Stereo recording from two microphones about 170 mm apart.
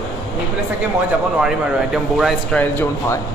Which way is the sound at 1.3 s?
5° right (ahead or behind).